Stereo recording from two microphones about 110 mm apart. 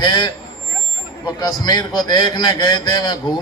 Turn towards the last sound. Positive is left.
turn(degrees=40)  # may be behind; listen again after turning